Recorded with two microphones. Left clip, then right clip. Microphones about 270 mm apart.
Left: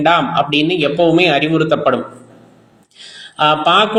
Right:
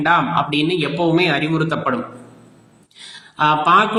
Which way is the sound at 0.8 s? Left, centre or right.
Centre.